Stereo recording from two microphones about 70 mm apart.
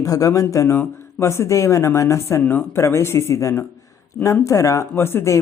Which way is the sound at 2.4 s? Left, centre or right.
Left.